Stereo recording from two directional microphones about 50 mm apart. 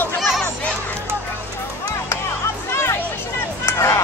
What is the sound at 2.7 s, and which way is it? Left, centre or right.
Music, left.